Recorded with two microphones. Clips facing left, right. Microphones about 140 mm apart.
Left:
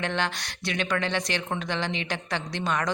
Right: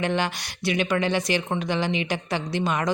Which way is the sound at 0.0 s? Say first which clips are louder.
Right 4 dB; 5° right (ahead or behind).